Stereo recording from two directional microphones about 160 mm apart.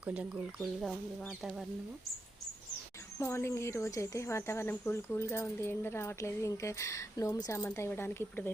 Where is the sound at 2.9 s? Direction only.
20° left (ahead or behind).